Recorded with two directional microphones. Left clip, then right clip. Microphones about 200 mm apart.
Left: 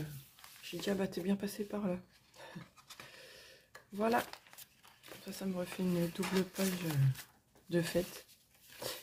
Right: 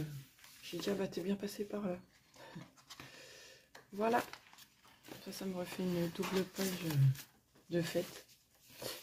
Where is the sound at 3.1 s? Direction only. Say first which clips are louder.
Left 1 dB; centre (ahead or behind).